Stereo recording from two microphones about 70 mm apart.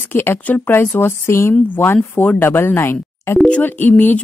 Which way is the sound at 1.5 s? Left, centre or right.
Left.